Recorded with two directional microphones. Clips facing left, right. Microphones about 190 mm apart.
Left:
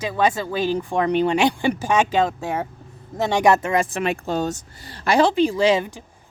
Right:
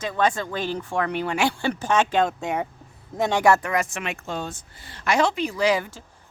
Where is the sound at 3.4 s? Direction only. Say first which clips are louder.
Left 3 dB; 20° left (ahead or behind).